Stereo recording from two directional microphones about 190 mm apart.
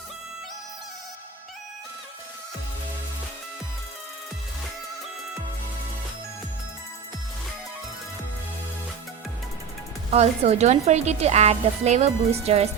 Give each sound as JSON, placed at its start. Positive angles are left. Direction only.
{"t": 10.1, "sound": "a woman's voice", "side_deg": -35}